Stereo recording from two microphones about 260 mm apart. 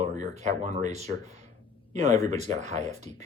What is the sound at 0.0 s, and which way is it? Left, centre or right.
Speech, right.